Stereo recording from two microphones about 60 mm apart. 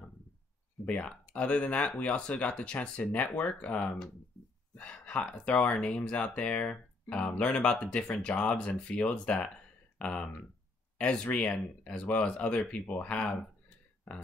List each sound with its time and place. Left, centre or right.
0.8 s speech: centre